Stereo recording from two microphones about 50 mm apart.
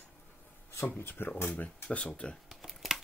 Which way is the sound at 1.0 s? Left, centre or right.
Left.